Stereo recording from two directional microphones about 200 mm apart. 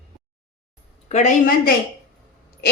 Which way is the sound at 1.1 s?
35° left (ahead or behind).